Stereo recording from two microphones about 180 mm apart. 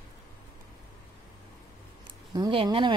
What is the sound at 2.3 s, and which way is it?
Speech, 25° right (ahead or behind).